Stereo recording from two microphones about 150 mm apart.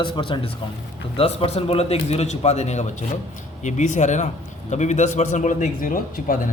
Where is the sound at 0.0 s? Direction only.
35° left (ahead or behind).